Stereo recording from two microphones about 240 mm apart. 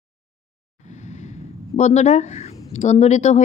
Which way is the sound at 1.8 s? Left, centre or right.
Left.